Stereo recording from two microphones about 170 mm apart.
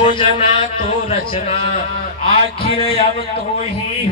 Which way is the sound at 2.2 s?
30° left (ahead or behind).